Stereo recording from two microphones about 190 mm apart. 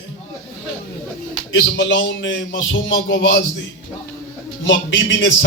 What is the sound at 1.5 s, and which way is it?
A man's voice, 85° left.